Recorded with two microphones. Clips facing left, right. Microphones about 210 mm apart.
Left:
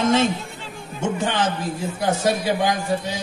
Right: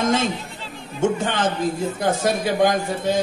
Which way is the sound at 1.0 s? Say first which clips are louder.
Right 2 dB; 50° right (ahead or behind).